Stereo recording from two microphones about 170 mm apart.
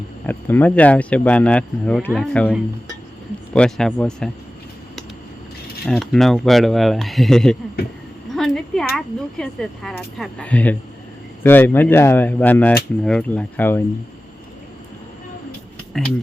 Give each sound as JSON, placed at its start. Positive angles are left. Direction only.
{"t": 0.3, "sound": "speech", "side_deg": 10}
{"t": 5.8, "sound": "speech", "side_deg": 0}
{"t": 15.9, "sound": "speech", "side_deg": 0}